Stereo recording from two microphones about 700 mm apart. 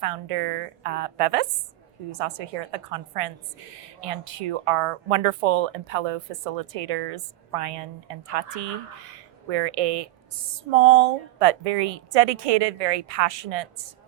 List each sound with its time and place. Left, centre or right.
0.0 s speech: right